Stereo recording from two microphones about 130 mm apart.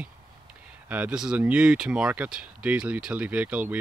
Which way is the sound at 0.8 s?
10° right (ahead or behind).